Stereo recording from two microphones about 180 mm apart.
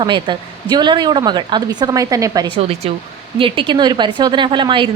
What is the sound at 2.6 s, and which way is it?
A woman's voice, 35° right (ahead or behind).